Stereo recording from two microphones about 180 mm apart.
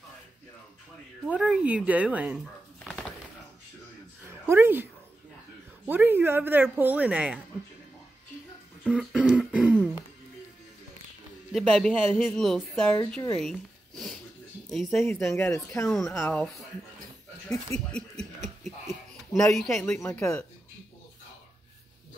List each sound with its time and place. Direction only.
1.2 s speech: 5° right (ahead or behind)
4.3 s a woman's voice: 15° right (ahead or behind)
5.9 s speech: 10° right (ahead or behind)
8.8 s throat clearing: 5° right (ahead or behind)
11.5 s speech: centre (ahead or behind)
13.4 s a sound: centre (ahead or behind)
14.7 s speech: centre (ahead or behind)
15.2 s speech: 15° left (ahead or behind)
15.9 s speech: centre (ahead or behind)
17.7 s speech: 5° left (ahead or behind)
18.6 s a sound: centre (ahead or behind)
20.2 s speech: 5° left (ahead or behind)